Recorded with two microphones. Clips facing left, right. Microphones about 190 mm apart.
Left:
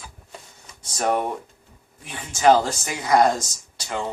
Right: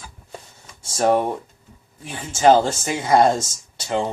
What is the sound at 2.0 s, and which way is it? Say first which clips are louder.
Speech: right 2 dB; 30° right (ahead or behind).